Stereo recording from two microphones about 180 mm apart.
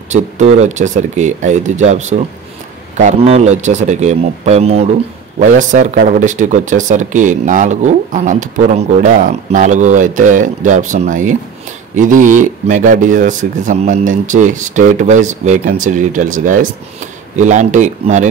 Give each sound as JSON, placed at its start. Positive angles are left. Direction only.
{"t": 0.1, "sound": "speech", "side_deg": -40}